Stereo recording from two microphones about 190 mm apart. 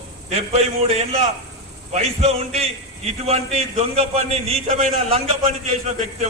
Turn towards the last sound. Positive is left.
turn(degrees=-35)  # may be behind; listen again after turning